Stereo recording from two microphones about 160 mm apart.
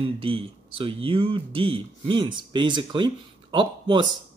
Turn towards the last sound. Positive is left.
turn(degrees=-30)  # may be behind; listen again after turning